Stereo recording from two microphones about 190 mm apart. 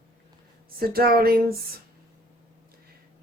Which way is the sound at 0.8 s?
50° right (ahead or behind).